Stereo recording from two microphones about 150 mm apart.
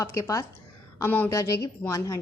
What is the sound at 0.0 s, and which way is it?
A woman's voice, 20° left (ahead or behind).